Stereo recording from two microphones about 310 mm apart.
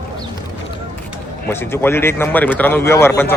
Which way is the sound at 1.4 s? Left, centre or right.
Centre.